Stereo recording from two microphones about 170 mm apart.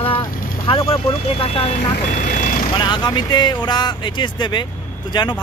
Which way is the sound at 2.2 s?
50° left (ahead or behind).